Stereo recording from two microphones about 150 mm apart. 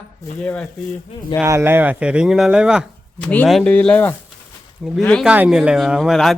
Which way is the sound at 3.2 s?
10° left (ahead or behind).